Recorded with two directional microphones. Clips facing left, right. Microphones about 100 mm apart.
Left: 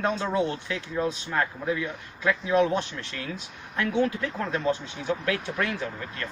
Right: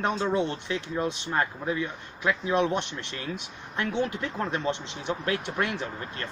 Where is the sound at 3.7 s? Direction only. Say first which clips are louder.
Left 3 dB; 25° right (ahead or behind).